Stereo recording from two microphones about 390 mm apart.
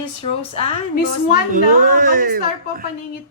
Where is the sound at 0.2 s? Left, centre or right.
Centre.